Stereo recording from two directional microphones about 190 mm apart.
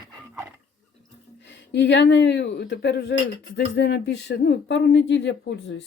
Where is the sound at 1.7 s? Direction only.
65° left (ahead or behind).